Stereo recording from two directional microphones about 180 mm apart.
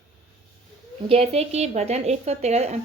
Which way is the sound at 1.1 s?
35° right (ahead or behind).